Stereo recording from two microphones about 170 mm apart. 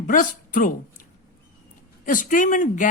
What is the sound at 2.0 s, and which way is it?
Speech, 50° left (ahead or behind).